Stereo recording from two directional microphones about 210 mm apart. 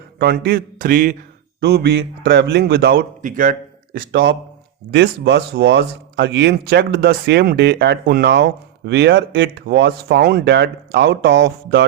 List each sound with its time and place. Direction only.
0.2 s speech: 50° right (ahead or behind)